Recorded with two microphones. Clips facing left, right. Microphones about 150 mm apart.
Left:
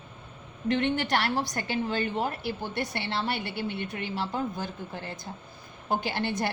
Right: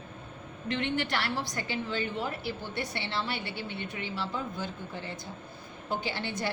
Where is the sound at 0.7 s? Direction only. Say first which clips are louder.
Left 5 dB; 50° left (ahead or behind).